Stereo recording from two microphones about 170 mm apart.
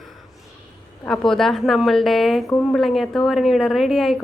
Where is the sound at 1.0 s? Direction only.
5° left (ahead or behind).